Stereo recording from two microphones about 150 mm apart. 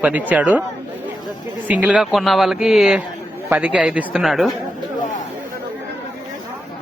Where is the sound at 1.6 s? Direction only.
10° right (ahead or behind).